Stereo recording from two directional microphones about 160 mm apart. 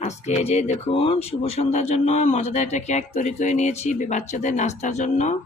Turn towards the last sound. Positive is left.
turn(degrees=50)  # may be behind; listen again after turning